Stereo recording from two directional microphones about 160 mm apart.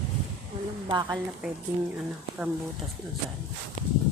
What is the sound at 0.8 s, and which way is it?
Speech, 30° right (ahead or behind).